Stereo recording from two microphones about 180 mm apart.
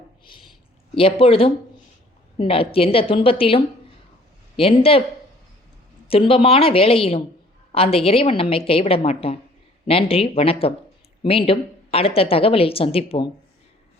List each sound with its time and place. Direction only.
0.9 s a woman's voice: 30° left (ahead or behind)
6.1 s a woman's voice: 30° left (ahead or behind)